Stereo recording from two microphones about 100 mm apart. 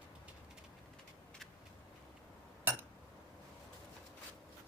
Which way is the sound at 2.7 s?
20° right (ahead or behind).